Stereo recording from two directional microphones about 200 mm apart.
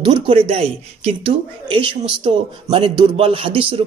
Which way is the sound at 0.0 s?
25° right (ahead or behind).